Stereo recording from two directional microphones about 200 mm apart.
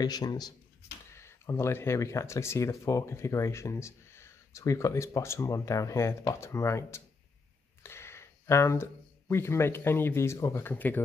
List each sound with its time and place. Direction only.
0.0 s speech: 20° left (ahead or behind)
7.8 s a sound: 15° left (ahead or behind)
9.3 s speech: 15° left (ahead or behind)